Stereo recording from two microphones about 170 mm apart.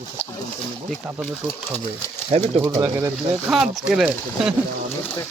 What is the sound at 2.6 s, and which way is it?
Speech, 15° right (ahead or behind).